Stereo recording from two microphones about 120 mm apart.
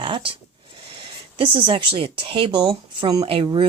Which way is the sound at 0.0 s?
45° right (ahead or behind).